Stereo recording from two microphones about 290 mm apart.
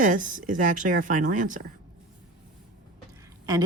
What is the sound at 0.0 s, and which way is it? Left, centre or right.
Speech, right.